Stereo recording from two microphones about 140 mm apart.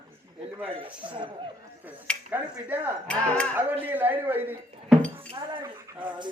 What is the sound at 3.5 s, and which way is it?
A man's voice, 15° right (ahead or behind).